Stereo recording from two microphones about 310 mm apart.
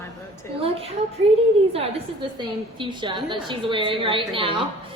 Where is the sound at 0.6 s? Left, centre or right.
Centre.